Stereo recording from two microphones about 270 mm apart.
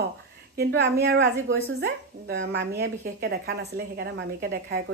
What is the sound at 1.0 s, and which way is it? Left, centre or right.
Speech, right.